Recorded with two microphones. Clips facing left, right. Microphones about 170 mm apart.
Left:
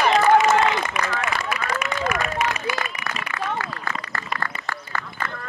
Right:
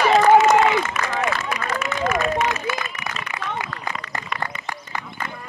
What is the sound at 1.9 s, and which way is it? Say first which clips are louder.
Run: right 2 dB; 15° left (ahead or behind).